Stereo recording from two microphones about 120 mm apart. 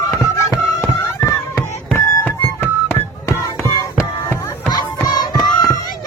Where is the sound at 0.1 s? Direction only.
25° left (ahead or behind).